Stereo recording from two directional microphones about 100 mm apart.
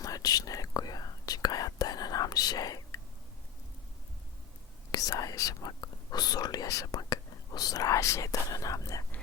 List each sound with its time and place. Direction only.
0.0 s whispering: 40° left (ahead or behind)
4.9 s whispering: 40° left (ahead or behind)